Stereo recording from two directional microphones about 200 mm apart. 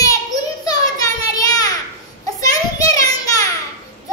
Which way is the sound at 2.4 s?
15° left (ahead or behind).